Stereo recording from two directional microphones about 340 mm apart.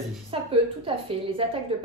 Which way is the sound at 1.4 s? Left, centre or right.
Centre.